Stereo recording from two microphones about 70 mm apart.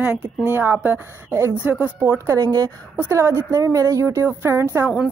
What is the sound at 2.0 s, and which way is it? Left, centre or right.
Speech, right.